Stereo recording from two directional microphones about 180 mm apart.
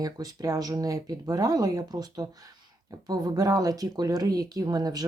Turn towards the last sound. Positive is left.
turn(degrees=-20)  # may be behind; listen again after turning